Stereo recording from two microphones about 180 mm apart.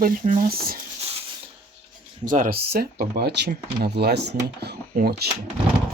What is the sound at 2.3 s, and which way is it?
Speech, 50° right (ahead or behind).